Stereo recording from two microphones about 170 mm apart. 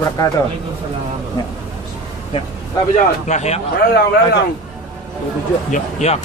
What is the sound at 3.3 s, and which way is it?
Speech, 40° left (ahead or behind).